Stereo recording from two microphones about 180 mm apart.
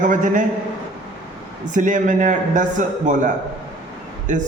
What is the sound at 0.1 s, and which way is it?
Speech, 45° right (ahead or behind).